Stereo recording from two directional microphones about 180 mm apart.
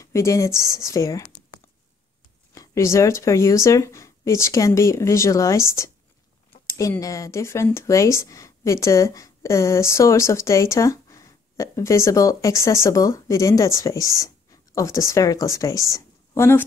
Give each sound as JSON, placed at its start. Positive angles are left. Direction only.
{"t": 0.0, "sound": "speech", "side_deg": 15}
{"t": 2.5, "sound": "speech", "side_deg": 20}